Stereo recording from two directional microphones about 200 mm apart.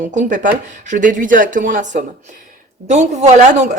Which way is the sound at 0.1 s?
40° right (ahead or behind).